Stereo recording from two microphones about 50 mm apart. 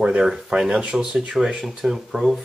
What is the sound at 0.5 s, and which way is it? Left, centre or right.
Speech, centre.